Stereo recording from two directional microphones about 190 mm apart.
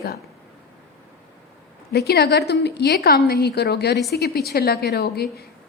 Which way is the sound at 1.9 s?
60° left (ahead or behind).